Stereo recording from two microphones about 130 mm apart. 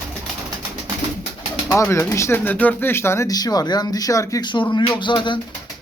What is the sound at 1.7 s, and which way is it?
Speech, 20° left (ahead or behind).